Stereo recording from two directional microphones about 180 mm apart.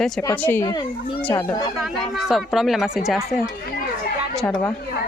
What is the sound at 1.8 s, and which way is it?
Speech, centre (ahead or behind).